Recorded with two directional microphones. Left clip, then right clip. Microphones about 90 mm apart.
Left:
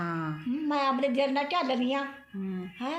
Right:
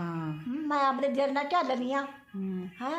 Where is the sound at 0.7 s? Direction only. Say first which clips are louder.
Right 1 dB; 30° right (ahead or behind).